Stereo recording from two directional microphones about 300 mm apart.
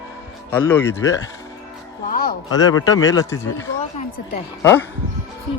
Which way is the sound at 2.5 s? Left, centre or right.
Centre.